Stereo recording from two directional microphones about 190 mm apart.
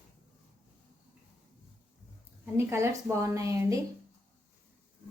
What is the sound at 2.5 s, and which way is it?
A woman's voice, 15° right (ahead or behind).